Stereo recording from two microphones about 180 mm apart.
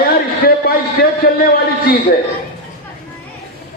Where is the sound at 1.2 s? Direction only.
55° left (ahead or behind).